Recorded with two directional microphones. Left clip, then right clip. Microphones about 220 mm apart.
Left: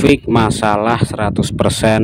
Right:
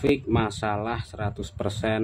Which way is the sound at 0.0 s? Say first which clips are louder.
Left 11 dB; 45° left (ahead or behind).